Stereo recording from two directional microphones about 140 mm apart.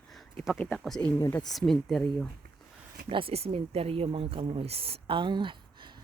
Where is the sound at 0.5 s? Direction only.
10° left (ahead or behind).